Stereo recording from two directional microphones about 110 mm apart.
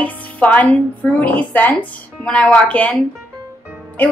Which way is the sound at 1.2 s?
15° left (ahead or behind).